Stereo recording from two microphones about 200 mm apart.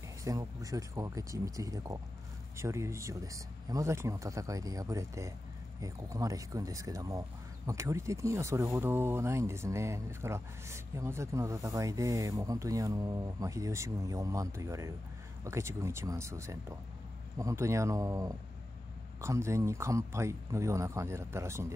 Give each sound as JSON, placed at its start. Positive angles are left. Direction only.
{"t": 0.2, "sound": "speech", "side_deg": -15}